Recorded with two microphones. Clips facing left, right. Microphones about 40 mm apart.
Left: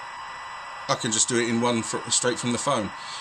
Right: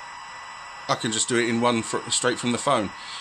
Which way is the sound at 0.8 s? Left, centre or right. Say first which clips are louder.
Right 1 dB; centre.